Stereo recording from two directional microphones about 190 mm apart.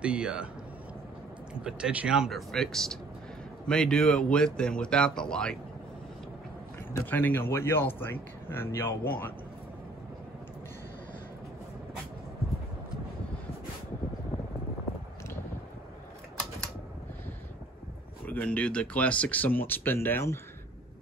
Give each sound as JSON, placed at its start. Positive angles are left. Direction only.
{"t": 0.0, "sound": "speech", "side_deg": -5}
{"t": 1.5, "sound": "speech", "side_deg": -5}
{"t": 6.9, "sound": "speech", "side_deg": 10}
{"t": 18.2, "sound": "speech", "side_deg": 10}